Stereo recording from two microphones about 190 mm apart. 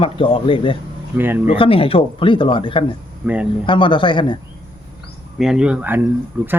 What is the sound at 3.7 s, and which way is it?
Speech, 25° left (ahead or behind).